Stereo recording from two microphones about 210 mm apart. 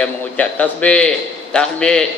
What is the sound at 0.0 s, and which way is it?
A man's voice, 5° left (ahead or behind).